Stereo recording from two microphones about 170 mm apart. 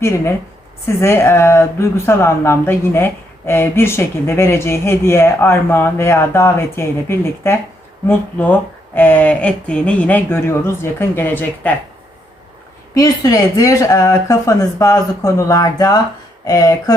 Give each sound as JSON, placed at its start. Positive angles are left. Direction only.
{"t": 0.0, "sound": "speech", "side_deg": 15}
{"t": 12.9, "sound": "speech", "side_deg": 20}